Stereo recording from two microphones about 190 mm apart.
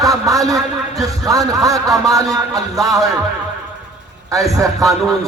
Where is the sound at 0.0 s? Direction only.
20° right (ahead or behind).